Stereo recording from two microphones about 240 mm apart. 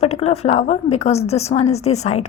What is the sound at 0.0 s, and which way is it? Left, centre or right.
A woman's voice, left.